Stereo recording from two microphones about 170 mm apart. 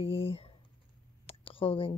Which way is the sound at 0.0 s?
35° left (ahead or behind).